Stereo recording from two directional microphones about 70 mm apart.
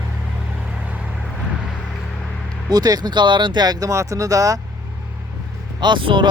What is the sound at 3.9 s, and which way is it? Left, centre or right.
Speech, right.